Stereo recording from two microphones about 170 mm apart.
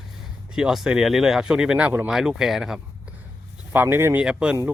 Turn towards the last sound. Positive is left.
turn(degrees=-5)  # may be behind; listen again after turning